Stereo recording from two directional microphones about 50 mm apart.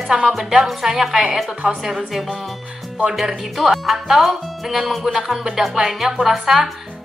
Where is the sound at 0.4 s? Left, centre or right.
Centre.